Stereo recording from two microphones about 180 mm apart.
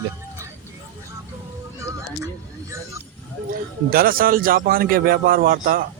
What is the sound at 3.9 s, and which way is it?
A man's voice, 55° right (ahead or behind).